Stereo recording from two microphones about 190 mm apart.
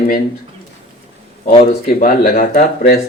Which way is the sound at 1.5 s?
45° left (ahead or behind).